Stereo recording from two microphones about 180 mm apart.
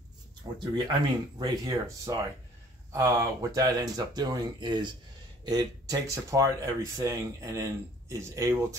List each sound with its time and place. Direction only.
0.6 s speech: 25° right (ahead or behind)